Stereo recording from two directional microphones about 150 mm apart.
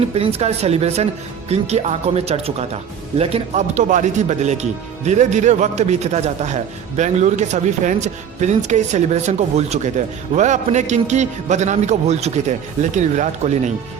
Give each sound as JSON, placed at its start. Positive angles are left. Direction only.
{"t": 0.0, "sound": "a man's voice", "side_deg": -40}